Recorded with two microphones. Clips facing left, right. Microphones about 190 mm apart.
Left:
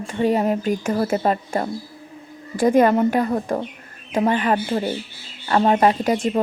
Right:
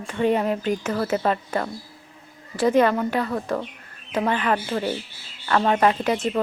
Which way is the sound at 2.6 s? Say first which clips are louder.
Left 3 dB; 50° left (ahead or behind).